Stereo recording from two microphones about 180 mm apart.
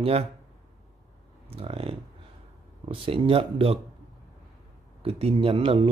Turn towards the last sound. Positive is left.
turn(degrees=-30)  # may be behind; listen again after turning